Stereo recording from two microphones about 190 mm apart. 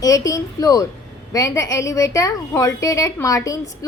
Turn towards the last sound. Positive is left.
turn(degrees=15)  # may be behind; listen again after turning